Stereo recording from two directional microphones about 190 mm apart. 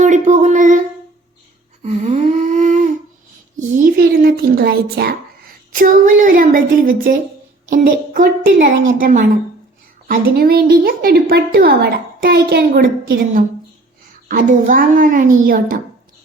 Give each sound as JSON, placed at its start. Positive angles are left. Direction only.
{"t": 0.0, "sound": "speech", "side_deg": -40}
{"t": 1.8, "sound": "a sound", "side_deg": -35}
{"t": 3.6, "sound": "a child's voice", "side_deg": -50}